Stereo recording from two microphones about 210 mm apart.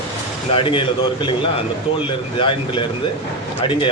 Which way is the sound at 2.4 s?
25° left (ahead or behind).